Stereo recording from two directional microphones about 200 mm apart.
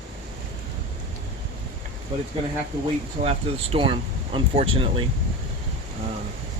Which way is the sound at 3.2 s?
30° right (ahead or behind).